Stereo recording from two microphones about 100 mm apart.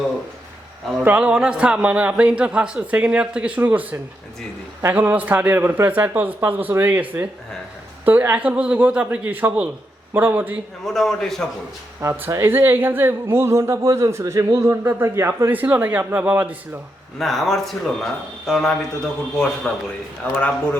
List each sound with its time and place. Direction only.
1.0 s a man's voice: 15° right (ahead or behind)
10.8 s speech: 5° left (ahead or behind)
11.9 s speech: 20° right (ahead or behind)
17.2 s a man's voice: centre (ahead or behind)